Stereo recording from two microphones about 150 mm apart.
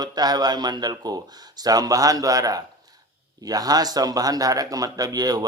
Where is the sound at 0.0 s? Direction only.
25° right (ahead or behind).